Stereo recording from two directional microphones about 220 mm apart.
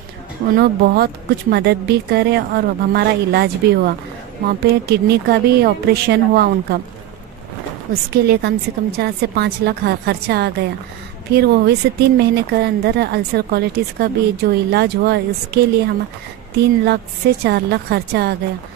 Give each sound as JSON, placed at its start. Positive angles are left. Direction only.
{"t": 0.6, "sound": "speech", "side_deg": -45}
{"t": 7.9, "sound": "speech", "side_deg": -45}